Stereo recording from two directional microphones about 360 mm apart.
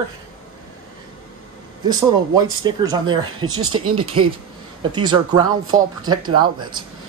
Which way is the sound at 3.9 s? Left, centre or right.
Centre.